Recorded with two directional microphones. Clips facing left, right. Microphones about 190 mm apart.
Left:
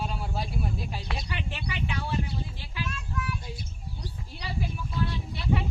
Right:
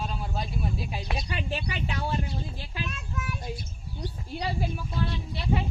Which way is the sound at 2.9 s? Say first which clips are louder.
Left 1 dB; 20° right (ahead or behind).